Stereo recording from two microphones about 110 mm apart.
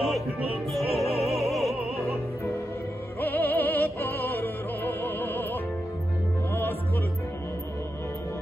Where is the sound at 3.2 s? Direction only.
15° left (ahead or behind).